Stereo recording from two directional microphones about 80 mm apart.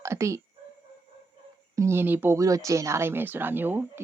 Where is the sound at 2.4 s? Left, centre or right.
Right.